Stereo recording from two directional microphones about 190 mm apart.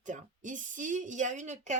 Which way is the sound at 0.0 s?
40° right (ahead or behind).